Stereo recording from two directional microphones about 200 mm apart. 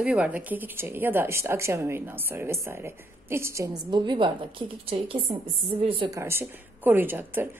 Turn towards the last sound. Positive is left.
turn(degrees=-10)  # may be behind; listen again after turning